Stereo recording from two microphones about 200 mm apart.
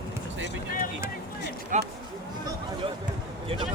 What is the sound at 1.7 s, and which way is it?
Speech, 40° right (ahead or behind).